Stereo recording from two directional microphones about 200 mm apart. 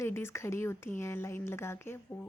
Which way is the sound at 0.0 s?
10° left (ahead or behind).